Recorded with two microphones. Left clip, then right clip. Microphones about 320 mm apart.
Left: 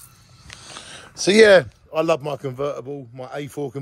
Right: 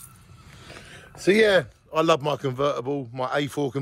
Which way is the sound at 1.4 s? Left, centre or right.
Left.